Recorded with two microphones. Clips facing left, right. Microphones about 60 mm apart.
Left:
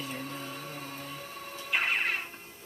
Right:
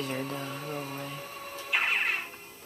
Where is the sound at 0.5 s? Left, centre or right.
Centre.